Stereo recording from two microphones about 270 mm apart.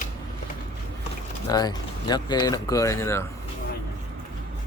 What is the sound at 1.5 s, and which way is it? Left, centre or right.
Speech, centre.